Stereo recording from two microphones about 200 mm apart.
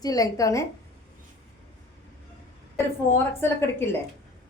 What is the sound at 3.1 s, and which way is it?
Speech, 10° left (ahead or behind).